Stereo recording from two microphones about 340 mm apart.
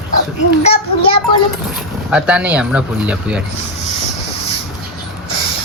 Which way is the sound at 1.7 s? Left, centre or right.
Centre.